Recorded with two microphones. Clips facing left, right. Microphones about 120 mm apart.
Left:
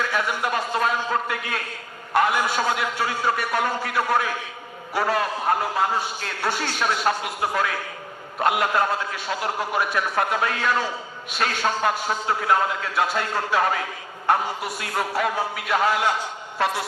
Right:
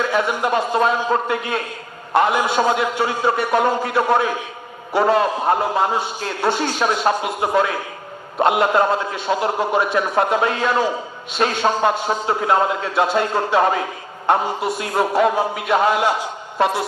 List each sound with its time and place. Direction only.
0.0 s a man's voice: 25° right (ahead or behind)